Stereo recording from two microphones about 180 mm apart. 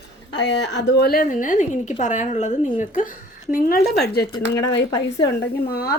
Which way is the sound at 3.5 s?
60° left (ahead or behind).